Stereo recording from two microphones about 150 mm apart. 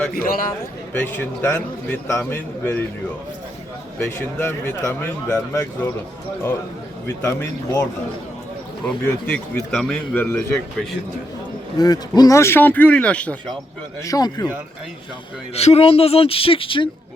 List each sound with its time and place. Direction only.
0.1 s a man's voice: 75° left (ahead or behind)
1.1 s speech: 15° left (ahead or behind)
3.9 s speech: 15° left (ahead or behind)
7.3 s speech: 15° left (ahead or behind)
11.8 s speech: 25° left (ahead or behind); by 13.6 s 5° left (ahead or behind)
14.0 s speech: 25° left (ahead or behind)
15.5 s speech: 45° left (ahead or behind)